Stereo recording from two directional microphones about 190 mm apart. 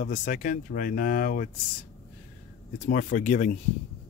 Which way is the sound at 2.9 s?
45° left (ahead or behind).